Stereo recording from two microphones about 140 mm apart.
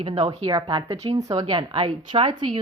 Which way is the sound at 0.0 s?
40° right (ahead or behind).